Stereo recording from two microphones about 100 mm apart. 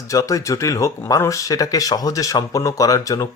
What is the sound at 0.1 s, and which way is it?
Speech, 30° left (ahead or behind).